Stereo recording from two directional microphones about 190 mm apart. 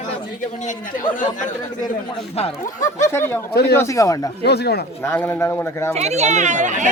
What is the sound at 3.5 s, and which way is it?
Speech, 60° left (ahead or behind).